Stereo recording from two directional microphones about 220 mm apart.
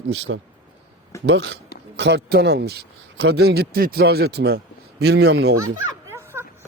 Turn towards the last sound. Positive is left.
turn(degrees=-10)  # may be behind; listen again after turning